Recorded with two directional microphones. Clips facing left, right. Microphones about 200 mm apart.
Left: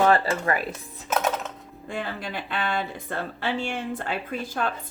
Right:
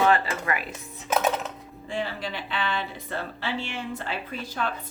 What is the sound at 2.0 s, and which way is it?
Speech, 50° left (ahead or behind).